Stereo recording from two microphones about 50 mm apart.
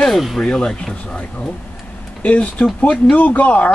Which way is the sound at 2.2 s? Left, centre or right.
Left.